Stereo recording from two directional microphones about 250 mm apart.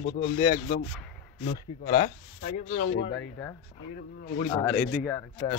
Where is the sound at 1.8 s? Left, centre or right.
Left.